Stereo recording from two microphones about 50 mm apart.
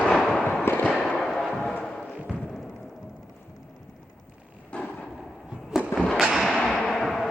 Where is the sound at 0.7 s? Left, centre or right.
Left.